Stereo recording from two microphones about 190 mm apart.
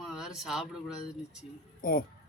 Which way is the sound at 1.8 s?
50° left (ahead or behind).